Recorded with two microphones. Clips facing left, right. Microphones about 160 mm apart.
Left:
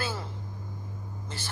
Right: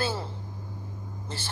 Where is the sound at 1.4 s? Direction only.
30° right (ahead or behind).